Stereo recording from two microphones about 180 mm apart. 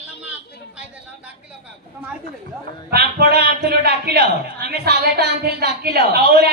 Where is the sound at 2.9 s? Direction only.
60° right (ahead or behind).